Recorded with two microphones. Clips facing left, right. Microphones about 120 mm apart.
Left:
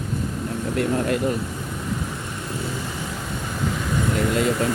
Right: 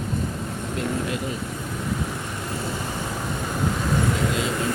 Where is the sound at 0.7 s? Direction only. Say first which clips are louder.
Left 5 dB; 55° left (ahead or behind).